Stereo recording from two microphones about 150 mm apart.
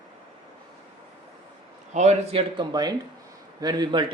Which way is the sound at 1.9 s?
50° right (ahead or behind).